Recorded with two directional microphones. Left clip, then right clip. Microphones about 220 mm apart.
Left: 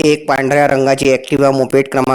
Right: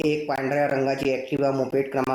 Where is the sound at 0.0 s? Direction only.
40° left (ahead or behind).